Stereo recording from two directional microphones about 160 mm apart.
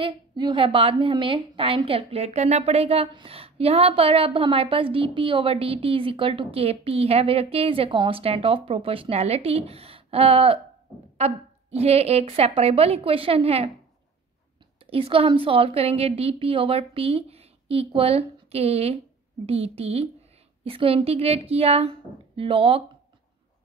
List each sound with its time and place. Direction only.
0.0 s a woman's voice: 30° right (ahead or behind)
14.9 s a woman's voice: 35° right (ahead or behind)